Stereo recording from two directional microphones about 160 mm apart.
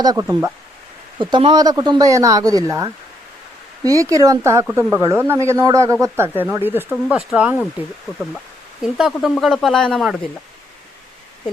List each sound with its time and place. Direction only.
0.0 s speech: 20° right (ahead or behind)
1.2 s speech: 30° right (ahead or behind); by 7.6 s 5° right (ahead or behind)
8.8 s speech: centre (ahead or behind)